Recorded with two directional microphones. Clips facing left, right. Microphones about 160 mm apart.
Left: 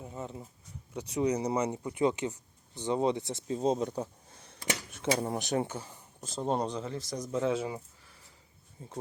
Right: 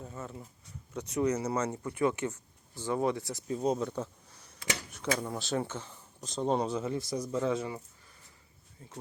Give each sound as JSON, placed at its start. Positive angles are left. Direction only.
{"t": 0.0, "sound": "speech", "side_deg": 20}
{"t": 4.3, "sound": "a sound", "side_deg": 55}
{"t": 4.9, "sound": "speech", "side_deg": 25}
{"t": 7.3, "sound": "speech", "side_deg": 10}
{"t": 8.8, "sound": "speech", "side_deg": 25}